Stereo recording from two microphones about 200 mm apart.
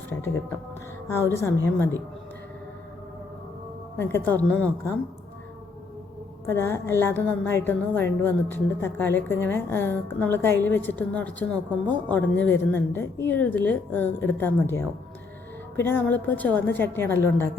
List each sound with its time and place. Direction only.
0.1 s a woman's voice: 10° left (ahead or behind)
3.9 s a woman's voice: 10° left (ahead or behind)
6.4 s a woman's voice: 10° left (ahead or behind)